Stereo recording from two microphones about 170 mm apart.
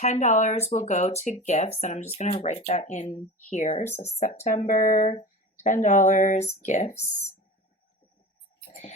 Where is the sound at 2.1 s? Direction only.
40° left (ahead or behind).